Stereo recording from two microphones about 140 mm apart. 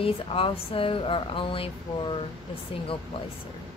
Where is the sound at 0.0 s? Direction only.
40° left (ahead or behind).